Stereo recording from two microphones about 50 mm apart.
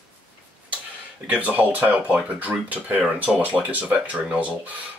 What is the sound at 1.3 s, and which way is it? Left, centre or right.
Speech, right.